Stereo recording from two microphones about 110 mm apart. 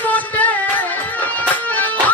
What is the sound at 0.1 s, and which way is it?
Music, 15° left (ahead or behind).